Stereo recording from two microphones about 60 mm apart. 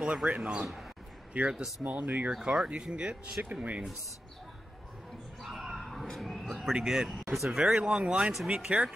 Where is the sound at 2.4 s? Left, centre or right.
Centre.